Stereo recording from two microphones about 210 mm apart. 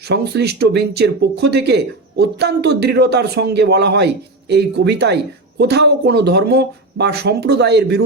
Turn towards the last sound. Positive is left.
turn(degrees=-50)  # may be behind; listen again after turning